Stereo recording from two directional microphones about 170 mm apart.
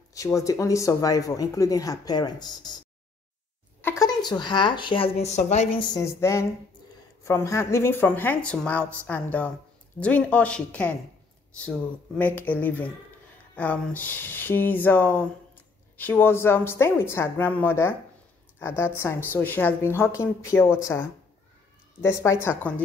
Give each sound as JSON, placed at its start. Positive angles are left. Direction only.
{"t": 0.1, "sound": "speech", "side_deg": 20}
{"t": 4.0, "sound": "speech", "side_deg": 25}
{"t": 5.8, "sound": "a woman's voice", "side_deg": 20}
{"t": 12.2, "sound": "a woman's voice", "side_deg": 10}